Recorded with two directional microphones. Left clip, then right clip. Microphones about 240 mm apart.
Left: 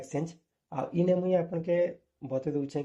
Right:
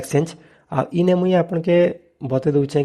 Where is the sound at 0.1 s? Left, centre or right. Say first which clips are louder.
Right 15 dB; right.